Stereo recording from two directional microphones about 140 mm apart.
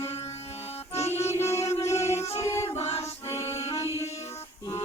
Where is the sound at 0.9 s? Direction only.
20° left (ahead or behind).